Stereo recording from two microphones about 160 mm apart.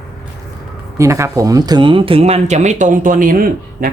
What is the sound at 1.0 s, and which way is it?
Speech, 20° right (ahead or behind).